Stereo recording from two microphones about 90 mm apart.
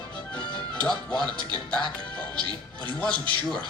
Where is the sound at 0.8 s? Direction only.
55° right (ahead or behind).